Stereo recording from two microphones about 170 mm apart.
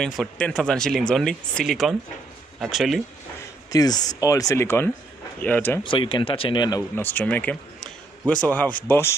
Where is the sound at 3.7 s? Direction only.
20° left (ahead or behind).